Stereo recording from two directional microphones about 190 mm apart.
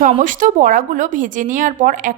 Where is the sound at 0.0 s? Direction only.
45° right (ahead or behind).